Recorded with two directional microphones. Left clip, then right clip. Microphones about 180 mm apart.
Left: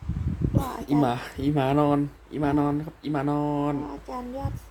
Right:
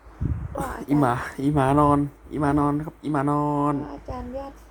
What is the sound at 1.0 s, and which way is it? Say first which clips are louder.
Speech: right 3 dB; 15° right (ahead or behind).